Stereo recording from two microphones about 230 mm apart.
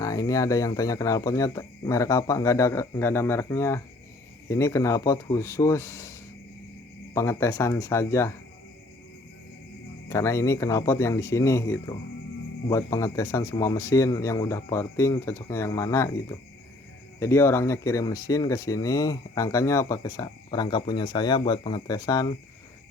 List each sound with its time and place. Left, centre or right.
0.0 s speech: centre
10.1 s speech: centre
17.2 s speech: centre